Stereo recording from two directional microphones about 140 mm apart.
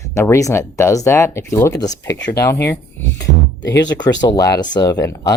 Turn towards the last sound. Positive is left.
turn(degrees=25)  # may be behind; listen again after turning